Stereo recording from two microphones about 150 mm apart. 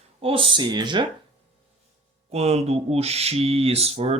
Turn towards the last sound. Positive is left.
turn(degrees=-40)  # may be behind; listen again after turning